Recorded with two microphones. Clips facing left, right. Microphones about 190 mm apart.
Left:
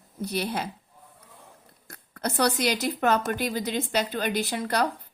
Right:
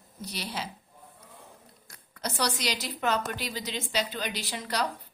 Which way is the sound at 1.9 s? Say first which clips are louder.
Left 6 dB; 55° left (ahead or behind).